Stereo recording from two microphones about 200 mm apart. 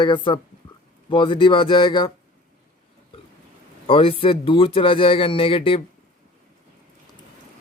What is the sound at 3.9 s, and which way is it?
Speech, 25° left (ahead or behind).